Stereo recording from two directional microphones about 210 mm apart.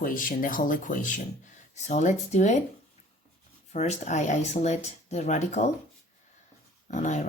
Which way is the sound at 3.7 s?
30° left (ahead or behind).